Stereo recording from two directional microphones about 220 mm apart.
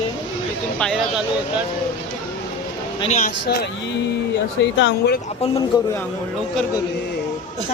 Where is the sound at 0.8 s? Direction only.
Centre (ahead or behind).